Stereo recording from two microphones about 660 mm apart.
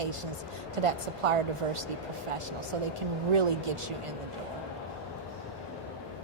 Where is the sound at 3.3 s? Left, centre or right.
Right.